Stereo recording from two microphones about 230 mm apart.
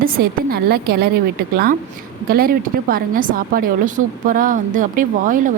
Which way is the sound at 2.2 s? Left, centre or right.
Right.